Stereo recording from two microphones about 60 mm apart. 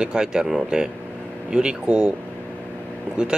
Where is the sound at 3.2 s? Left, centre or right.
Centre.